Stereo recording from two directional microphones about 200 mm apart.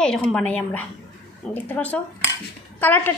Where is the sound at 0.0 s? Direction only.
5° left (ahead or behind).